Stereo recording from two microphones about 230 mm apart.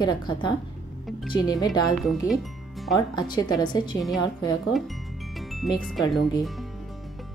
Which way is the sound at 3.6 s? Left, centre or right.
Centre.